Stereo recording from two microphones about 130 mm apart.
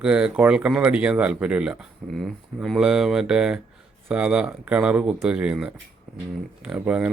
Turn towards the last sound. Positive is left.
turn(degrees=-10)  # may be behind; listen again after turning